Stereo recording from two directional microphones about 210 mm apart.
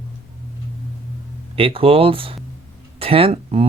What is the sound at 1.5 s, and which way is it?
Speech, 25° right (ahead or behind).